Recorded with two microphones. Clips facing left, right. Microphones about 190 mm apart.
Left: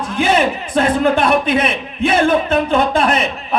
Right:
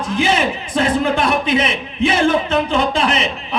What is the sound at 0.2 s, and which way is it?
A man's voice, 55° left (ahead or behind).